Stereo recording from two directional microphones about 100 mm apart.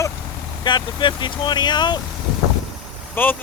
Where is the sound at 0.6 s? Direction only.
50° left (ahead or behind).